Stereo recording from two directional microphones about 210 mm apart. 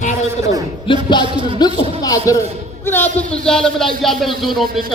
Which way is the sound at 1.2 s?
25° right (ahead or behind).